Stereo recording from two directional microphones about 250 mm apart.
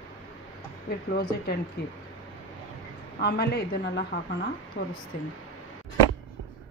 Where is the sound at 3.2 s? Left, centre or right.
Left.